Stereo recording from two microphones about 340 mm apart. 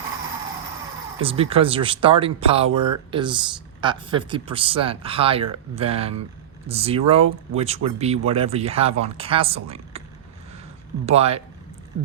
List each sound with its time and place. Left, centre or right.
1.2 s speech: centre
11.0 s speech: centre